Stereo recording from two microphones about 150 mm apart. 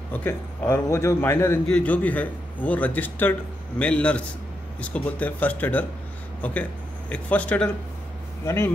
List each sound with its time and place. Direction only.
0.1 s a man's voice: 15° left (ahead or behind)